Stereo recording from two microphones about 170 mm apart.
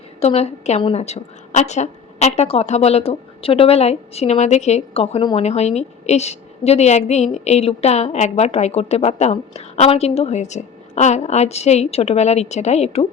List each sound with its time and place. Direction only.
0.2 s a woman's voice: 40° left (ahead or behind)